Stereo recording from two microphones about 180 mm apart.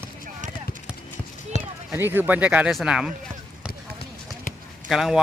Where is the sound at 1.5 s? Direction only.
40° left (ahead or behind).